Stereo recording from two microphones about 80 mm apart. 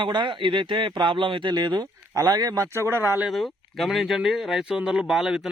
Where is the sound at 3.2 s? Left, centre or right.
Centre.